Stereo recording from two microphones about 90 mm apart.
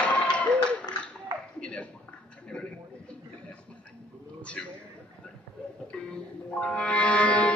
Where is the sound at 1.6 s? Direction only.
15° left (ahead or behind).